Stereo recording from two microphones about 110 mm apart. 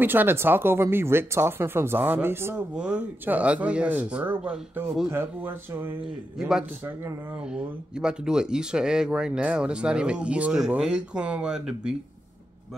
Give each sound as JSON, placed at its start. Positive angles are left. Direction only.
{"t": 0.0, "sound": "speech", "side_deg": -20}
{"t": 2.7, "sound": "speech", "side_deg": -10}
{"t": 4.8, "sound": "a man's voice", "side_deg": -5}
{"t": 5.1, "sound": "speech", "side_deg": -20}
{"t": 6.3, "sound": "a man's voice", "side_deg": -5}